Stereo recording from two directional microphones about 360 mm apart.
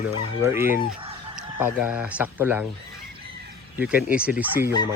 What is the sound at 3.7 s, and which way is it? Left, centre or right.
Speech, centre.